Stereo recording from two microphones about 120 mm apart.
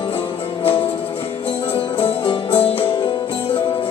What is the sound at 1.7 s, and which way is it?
Music, 50° left (ahead or behind).